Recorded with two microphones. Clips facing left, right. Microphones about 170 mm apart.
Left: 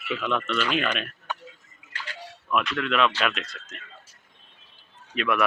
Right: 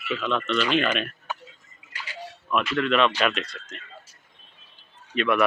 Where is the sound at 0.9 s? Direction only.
5° right (ahead or behind).